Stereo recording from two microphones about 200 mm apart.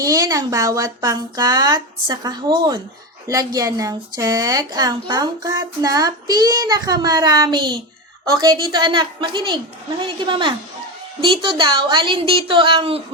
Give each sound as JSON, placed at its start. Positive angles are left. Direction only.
{"t": 0.0, "sound": "a woman's voice", "side_deg": -15}